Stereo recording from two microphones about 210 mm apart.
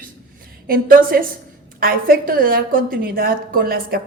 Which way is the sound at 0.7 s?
45° right (ahead or behind).